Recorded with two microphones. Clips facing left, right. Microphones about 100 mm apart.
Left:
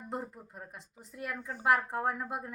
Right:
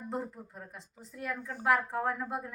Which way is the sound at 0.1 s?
10° left (ahead or behind).